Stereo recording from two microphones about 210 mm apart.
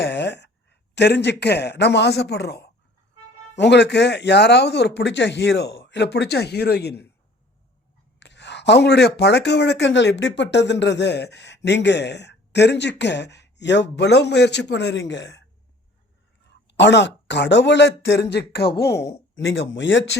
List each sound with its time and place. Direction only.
0.0 s speech: 55° left (ahead or behind)
8.2 s speech: 55° left (ahead or behind)
16.5 s speech: 55° left (ahead or behind)